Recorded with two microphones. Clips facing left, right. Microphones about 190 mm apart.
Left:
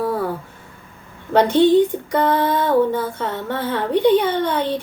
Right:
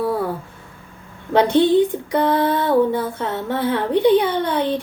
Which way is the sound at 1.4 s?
15° right (ahead or behind).